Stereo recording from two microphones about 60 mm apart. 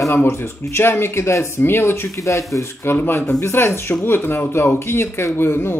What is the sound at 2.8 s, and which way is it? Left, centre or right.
Speech, left.